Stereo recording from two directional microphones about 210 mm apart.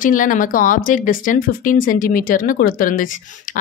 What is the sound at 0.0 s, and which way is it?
A woman's voice, 40° left (ahead or behind).